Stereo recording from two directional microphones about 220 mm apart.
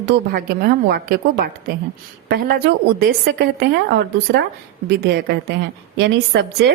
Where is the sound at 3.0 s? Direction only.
45° right (ahead or behind).